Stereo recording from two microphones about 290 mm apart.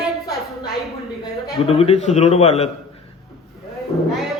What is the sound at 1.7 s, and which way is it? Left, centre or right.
A man's voice, left.